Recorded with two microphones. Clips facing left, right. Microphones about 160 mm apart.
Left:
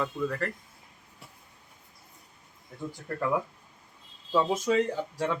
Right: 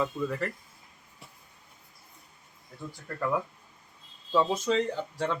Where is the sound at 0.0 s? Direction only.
5° right (ahead or behind).